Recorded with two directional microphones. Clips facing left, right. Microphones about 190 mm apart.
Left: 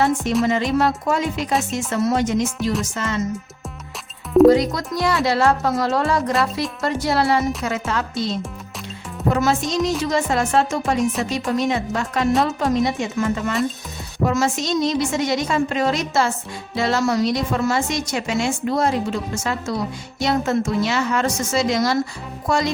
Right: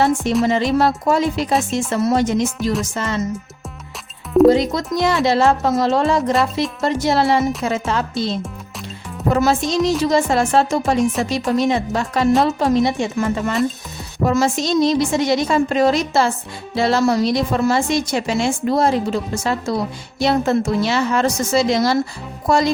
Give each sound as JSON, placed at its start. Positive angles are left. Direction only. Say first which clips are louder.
{"t": 0.4, "sound": "a woman's voice", "louder": "right 3 dB", "side_deg": -35}
{"t": 4.4, "sound": "speech", "louder": "right 2 dB", "side_deg": -25}
{"t": 9.3, "sound": "a woman's voice", "louder": "right 3 dB", "side_deg": -35}
{"t": 11.0, "sound": "speech", "louder": "right 3 dB", "side_deg": 0}
{"t": 11.3, "sound": "a woman's voice", "louder": "right 3 dB", "side_deg": -35}